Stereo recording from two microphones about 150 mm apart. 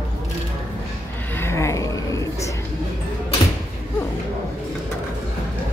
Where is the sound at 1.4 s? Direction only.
20° left (ahead or behind).